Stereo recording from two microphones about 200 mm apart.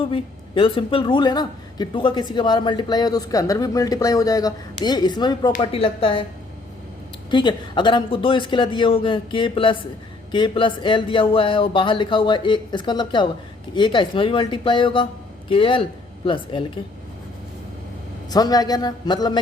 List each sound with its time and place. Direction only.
0.0 s a woman's voice: 25° left (ahead or behind)
7.3 s a woman's voice: 20° left (ahead or behind)
18.3 s a woman's voice: 20° left (ahead or behind)